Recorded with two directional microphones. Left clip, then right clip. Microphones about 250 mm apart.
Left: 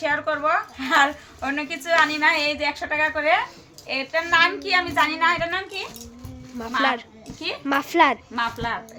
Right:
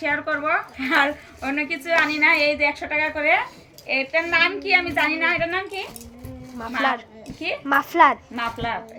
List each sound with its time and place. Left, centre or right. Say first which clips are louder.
0.0 s a woman's voice: left 1 dB; centre